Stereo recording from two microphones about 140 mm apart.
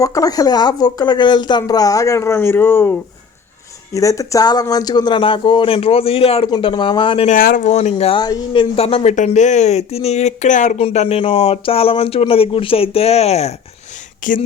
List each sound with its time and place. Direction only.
0.0 s speech: 25° left (ahead or behind)
3.9 s speech: 25° left (ahead or behind)
7.3 s speech: 85° left
7.7 s speech: 50° left (ahead or behind)
8.2 s speech: 30° left (ahead or behind)
8.7 s speech: 45° left (ahead or behind)
9.1 s speech: 60° left (ahead or behind)
10.8 s speech: 45° left (ahead or behind)
14.2 s speech: 70° left (ahead or behind)